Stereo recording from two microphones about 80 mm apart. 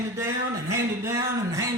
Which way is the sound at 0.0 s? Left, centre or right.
Right.